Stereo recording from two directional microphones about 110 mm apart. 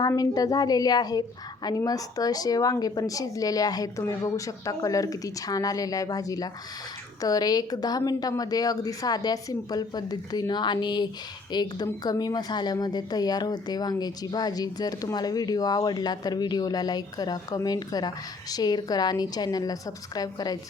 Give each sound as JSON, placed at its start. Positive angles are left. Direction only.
{"t": 0.2, "sound": "a woman's voice", "side_deg": 35}